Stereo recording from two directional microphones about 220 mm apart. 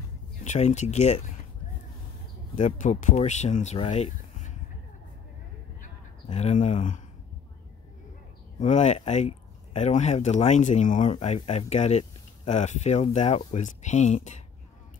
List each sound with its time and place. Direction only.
0.4 s speech: 30° left (ahead or behind)
2.5 s speech: 35° left (ahead or behind)
6.3 s speech: 30° left (ahead or behind)
8.5 s speech: 30° left (ahead or behind)